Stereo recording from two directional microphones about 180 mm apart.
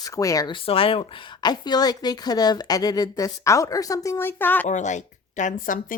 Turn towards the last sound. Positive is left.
turn(degrees=50)  # may be behind; listen again after turning